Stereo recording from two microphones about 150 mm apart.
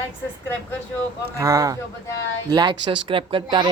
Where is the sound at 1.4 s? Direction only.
20° right (ahead or behind).